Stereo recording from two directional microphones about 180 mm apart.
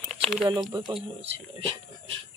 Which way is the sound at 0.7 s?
25° right (ahead or behind).